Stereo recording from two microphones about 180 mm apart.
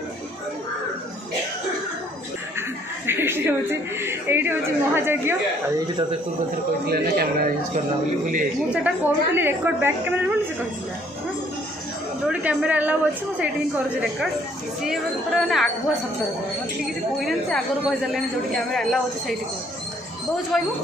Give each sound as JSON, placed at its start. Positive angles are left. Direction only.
{"t": 3.1, "sound": "a sound", "side_deg": -10}
{"t": 4.0, "sound": "a woman's voice", "side_deg": -15}
{"t": 6.9, "sound": "a man's voice", "side_deg": -55}
{"t": 8.6, "sound": "a woman's voice", "side_deg": -5}
{"t": 12.3, "sound": "a woman's voice", "side_deg": -10}
{"t": 17.2, "sound": "speech", "side_deg": 0}
{"t": 20.5, "sound": "speech", "side_deg": 0}